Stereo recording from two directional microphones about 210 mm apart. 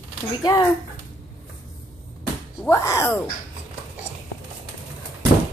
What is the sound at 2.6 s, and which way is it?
Speech, 15° left (ahead or behind).